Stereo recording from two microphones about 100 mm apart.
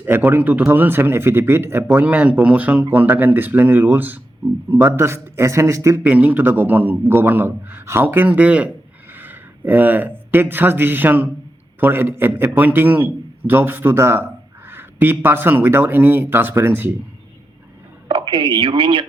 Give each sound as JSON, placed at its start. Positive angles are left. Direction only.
{"t": 0.0, "sound": "a man's voice", "side_deg": -20}
{"t": 6.0, "sound": "a man's voice", "side_deg": -15}
{"t": 18.1, "sound": "speech", "side_deg": -55}